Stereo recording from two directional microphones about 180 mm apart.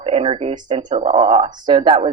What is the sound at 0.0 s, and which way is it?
A woman's voice, 35° right (ahead or behind).